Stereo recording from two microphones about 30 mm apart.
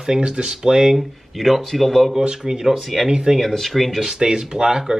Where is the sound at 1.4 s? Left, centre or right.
Centre.